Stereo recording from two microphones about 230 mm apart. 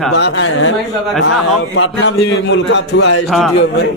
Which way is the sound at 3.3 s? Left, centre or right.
Centre.